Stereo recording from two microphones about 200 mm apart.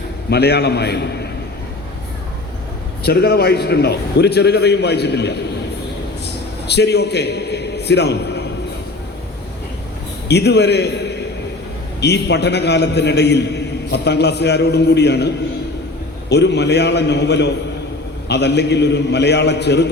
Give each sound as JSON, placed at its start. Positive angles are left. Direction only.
{"t": 0.3, "sound": "a man's voice", "side_deg": 55}
{"t": 3.0, "sound": "a man's voice", "side_deg": 55}
{"t": 6.7, "sound": "a man's voice", "side_deg": 55}
{"t": 10.2, "sound": "a man's voice", "side_deg": 55}
{"t": 16.3, "sound": "a man's voice", "side_deg": 60}